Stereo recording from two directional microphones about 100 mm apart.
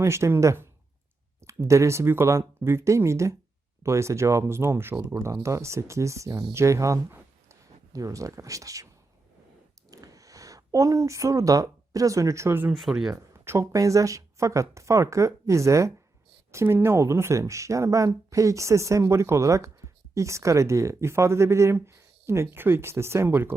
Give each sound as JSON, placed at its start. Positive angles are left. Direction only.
{"t": 0.0, "sound": "speech", "side_deg": -25}
{"t": 9.9, "sound": "speech", "side_deg": -35}
{"t": 12.7, "sound": "speech", "side_deg": 0}
{"t": 13.4, "sound": "speech", "side_deg": -25}